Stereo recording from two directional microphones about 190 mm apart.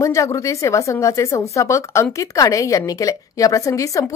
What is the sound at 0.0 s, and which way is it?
A woman's voice, 15° left (ahead or behind).